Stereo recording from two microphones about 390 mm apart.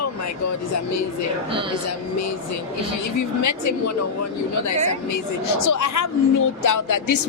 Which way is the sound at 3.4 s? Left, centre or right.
Left.